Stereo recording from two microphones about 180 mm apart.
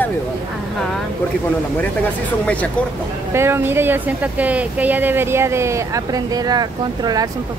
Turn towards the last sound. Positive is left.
turn(degrees=-20)  # may be behind; listen again after turning